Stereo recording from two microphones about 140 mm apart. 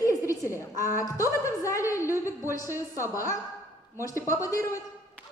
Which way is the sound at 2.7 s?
15° right (ahead or behind).